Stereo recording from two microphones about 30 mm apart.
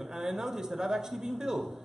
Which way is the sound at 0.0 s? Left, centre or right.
Centre.